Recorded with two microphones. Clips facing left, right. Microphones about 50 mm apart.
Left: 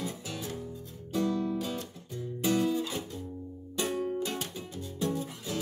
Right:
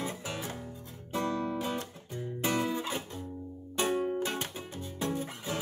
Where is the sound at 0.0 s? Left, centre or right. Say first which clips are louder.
Right 1 dB; right.